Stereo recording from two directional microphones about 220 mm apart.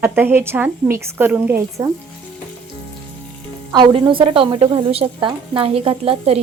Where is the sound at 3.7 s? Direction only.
20° right (ahead or behind).